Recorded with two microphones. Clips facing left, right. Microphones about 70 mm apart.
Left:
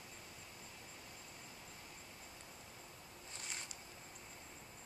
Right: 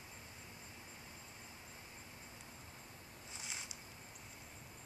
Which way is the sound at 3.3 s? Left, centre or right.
Centre.